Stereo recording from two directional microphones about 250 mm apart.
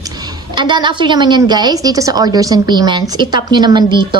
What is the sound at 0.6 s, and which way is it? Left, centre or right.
A woman's voice, centre.